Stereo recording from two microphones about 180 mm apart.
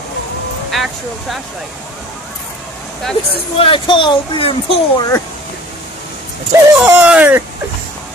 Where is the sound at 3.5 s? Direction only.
30° left (ahead or behind).